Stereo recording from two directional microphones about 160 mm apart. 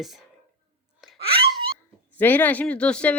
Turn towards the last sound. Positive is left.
turn(degrees=5)  # may be behind; listen again after turning